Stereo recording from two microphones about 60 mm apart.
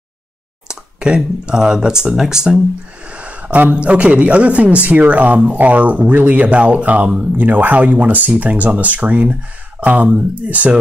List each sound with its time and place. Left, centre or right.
0.7 s speech: centre
3.1 s speech: right